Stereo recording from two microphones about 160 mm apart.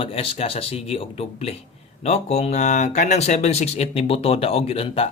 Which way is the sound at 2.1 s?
40° left (ahead or behind).